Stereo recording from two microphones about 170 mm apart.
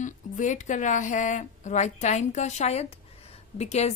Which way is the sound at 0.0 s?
45° left (ahead or behind).